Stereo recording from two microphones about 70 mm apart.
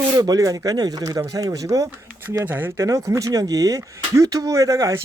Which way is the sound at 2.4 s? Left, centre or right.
Right.